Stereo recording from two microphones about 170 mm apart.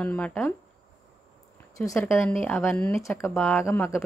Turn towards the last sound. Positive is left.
turn(degrees=15)  # may be behind; listen again after turning